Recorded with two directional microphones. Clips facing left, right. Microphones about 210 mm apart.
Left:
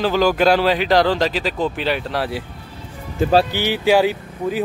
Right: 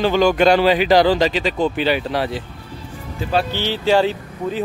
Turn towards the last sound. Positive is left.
turn(degrees=10)  # may be behind; listen again after turning